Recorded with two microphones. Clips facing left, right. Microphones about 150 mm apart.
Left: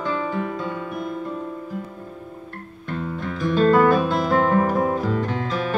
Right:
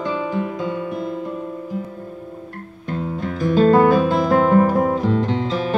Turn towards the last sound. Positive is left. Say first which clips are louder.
# right 3 dB
turn(degrees=-25)  # may be behind; listen again after turning